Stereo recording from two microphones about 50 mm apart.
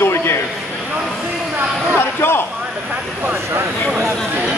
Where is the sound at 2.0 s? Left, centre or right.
Left.